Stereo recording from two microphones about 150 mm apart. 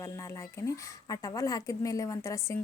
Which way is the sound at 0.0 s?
20° left (ahead or behind).